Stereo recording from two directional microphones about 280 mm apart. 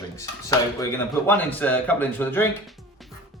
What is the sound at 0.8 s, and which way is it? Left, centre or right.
A man's voice, centre.